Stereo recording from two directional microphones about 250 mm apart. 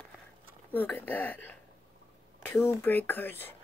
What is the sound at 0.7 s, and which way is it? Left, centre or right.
Speech, centre.